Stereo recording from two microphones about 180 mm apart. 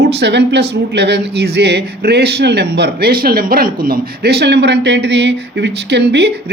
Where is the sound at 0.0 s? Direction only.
70° right (ahead or behind).